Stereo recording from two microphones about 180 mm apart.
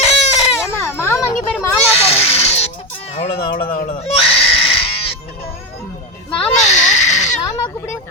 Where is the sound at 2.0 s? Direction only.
35° left (ahead or behind).